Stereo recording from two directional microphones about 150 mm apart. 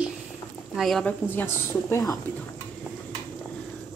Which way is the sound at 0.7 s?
Centre (ahead or behind).